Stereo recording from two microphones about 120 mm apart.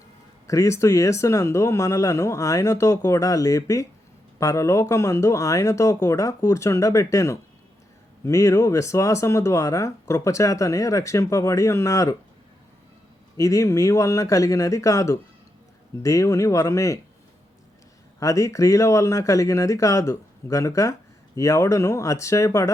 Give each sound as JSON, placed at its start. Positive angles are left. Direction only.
{"t": 0.4, "sound": "speech", "side_deg": 25}
{"t": 13.3, "sound": "speech", "side_deg": 25}
{"t": 18.2, "sound": "speech", "side_deg": 25}